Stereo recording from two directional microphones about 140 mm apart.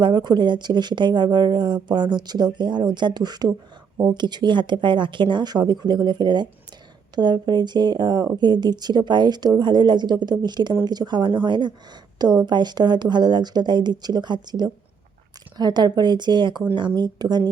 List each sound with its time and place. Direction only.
0.0 s speech: 30° right (ahead or behind)